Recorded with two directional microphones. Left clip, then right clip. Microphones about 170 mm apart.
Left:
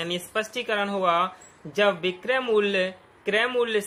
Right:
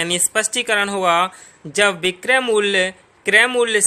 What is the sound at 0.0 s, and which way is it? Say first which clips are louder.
A man's voice: right 8 dB; 50° right (ahead or behind).